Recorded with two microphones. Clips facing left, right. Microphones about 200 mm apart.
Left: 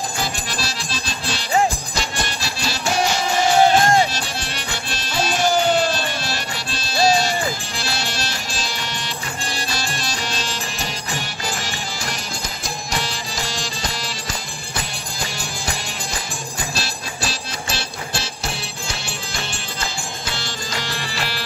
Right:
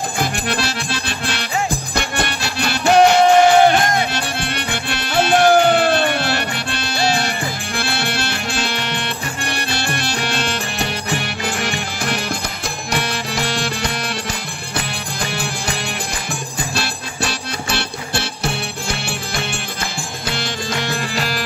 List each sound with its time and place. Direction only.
0.2 s music: 60° right (ahead or behind)
15.2 s music: 60° right (ahead or behind); by 21.4 s 45° right (ahead or behind)